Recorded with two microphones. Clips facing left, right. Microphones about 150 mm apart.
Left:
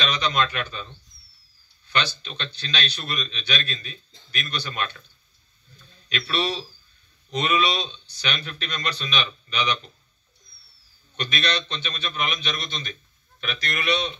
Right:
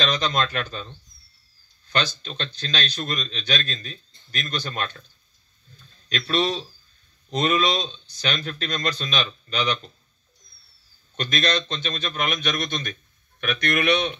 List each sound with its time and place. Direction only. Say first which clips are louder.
0.0 s speech: right 1 dB; 45° right (ahead or behind)
1.9 s speech: right 1 dB; 45° right (ahead or behind)
6.0 s speech: right 3 dB; 45° right (ahead or behind)
11.1 s a man's voice: right 3 dB; 45° right (ahead or behind)